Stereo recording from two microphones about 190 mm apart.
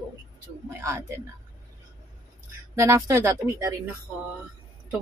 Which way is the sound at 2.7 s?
15° right (ahead or behind).